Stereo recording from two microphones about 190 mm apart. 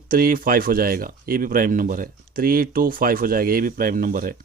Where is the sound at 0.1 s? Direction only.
50° right (ahead or behind).